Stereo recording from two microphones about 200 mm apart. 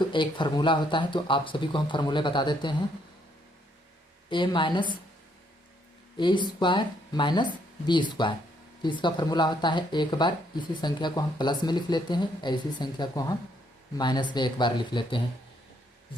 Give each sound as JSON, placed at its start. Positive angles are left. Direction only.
{"t": 0.0, "sound": "speech", "side_deg": 25}
{"t": 4.3, "sound": "speech", "side_deg": 25}
{"t": 6.1, "sound": "speech", "side_deg": 25}